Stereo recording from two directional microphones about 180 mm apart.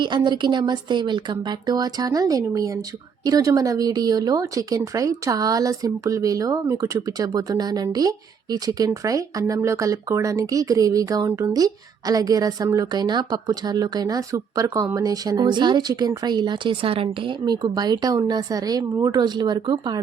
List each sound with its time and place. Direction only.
0.0 s speech: 25° right (ahead or behind)